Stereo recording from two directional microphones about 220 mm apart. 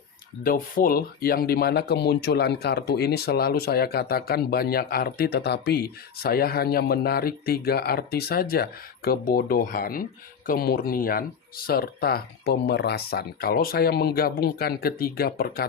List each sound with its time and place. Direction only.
0.4 s speech: 40° left (ahead or behind)